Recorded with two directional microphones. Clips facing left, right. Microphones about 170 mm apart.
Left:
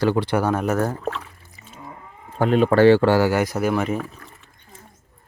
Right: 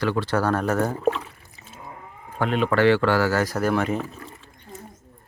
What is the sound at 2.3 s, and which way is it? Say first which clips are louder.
Speech: left 5 dB; 35° left (ahead or behind).